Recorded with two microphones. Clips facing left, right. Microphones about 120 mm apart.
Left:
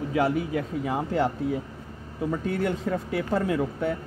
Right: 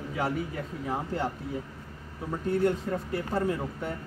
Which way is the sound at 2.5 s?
90° left.